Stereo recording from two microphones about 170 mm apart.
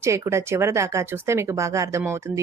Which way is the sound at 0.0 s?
15° right (ahead or behind).